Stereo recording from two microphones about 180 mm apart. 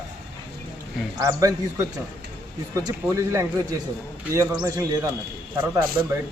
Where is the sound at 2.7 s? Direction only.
15° right (ahead or behind).